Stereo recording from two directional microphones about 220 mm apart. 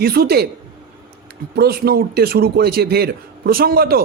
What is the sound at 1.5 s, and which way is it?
A man's voice, 45° right (ahead or behind).